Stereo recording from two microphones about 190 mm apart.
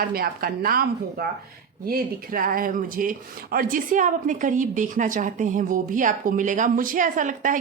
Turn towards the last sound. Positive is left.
turn(degrees=-45)  # may be behind; listen again after turning